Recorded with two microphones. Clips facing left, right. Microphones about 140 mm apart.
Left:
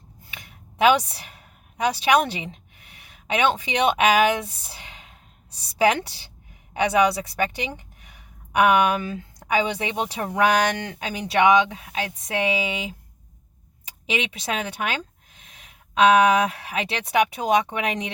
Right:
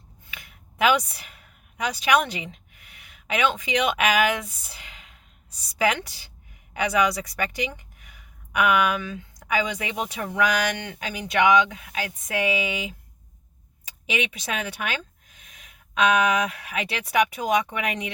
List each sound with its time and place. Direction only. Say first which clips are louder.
0.3 s a sound: left 1 dB; 30° left (ahead or behind)
5.5 s a woman's voice: left 4 dB; 30° left (ahead or behind)
14.1 s speech: left 1 dB; 30° left (ahead or behind)